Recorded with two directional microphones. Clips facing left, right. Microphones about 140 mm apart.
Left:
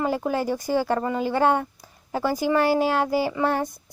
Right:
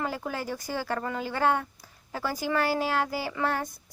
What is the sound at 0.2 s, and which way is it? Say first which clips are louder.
Speech: left 8 dB; 25° left (ahead or behind).